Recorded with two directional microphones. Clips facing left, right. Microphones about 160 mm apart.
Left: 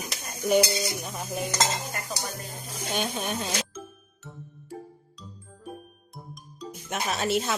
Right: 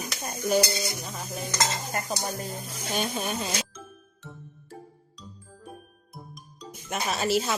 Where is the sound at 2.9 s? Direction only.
Centre (ahead or behind).